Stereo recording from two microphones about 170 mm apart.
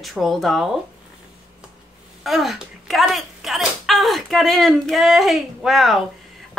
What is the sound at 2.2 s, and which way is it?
A woman's voice, centre (ahead or behind).